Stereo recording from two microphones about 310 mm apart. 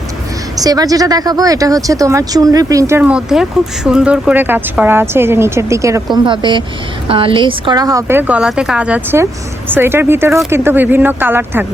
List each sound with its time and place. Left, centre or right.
0.6 s speech: centre